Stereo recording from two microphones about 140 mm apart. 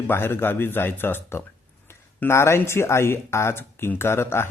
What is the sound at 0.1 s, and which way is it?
Speech, 15° left (ahead or behind).